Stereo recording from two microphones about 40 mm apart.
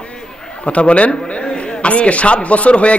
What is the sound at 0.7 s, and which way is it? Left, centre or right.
A man's voice, left.